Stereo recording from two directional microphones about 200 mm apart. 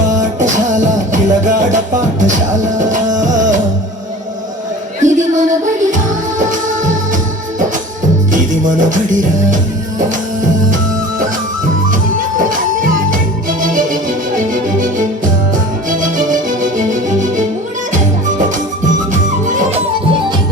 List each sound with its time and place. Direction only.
0.2 s music: 40° right (ahead or behind)
5.0 s music: 40° right (ahead or behind)
8.3 s music: 40° right (ahead or behind)
12.5 s music: 45° right (ahead or behind)
19.1 s music: 40° right (ahead or behind)